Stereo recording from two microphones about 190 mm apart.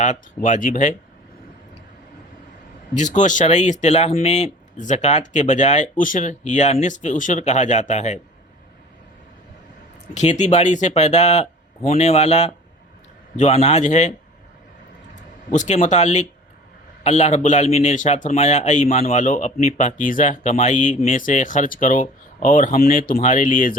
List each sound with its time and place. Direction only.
0.0 s speech: 40° left (ahead or behind)
3.0 s speech: 40° left (ahead or behind)
10.2 s speech: 40° left (ahead or behind)
15.5 s speech: 40° left (ahead or behind)